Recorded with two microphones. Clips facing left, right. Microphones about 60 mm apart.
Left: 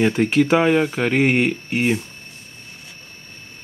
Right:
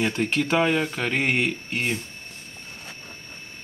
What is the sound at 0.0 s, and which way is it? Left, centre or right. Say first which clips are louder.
Speech: left 7 dB; centre.